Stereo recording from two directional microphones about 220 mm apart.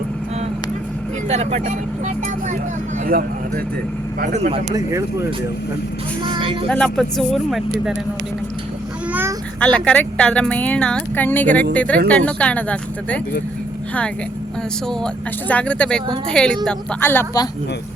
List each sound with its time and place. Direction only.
1.3 s speech: 30° right (ahead or behind)
3.1 s speech: 40° right (ahead or behind)
4.7 s speech: 15° right (ahead or behind)
6.2 s a sound: 20° right (ahead or behind)
6.7 s speech: 5° left (ahead or behind)
9.7 s speech: 5° left (ahead or behind)
14.8 s speech: 5° left (ahead or behind)